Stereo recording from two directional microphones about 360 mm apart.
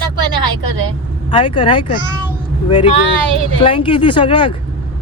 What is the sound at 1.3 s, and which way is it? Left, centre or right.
Speech, centre.